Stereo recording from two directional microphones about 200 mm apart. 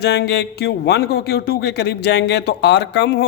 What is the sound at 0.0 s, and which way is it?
A man's voice, 55° left (ahead or behind).